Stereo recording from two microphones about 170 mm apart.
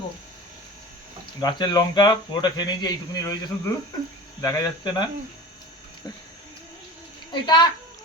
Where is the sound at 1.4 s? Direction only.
25° left (ahead or behind).